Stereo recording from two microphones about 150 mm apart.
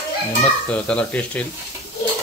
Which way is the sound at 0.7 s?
5° left (ahead or behind).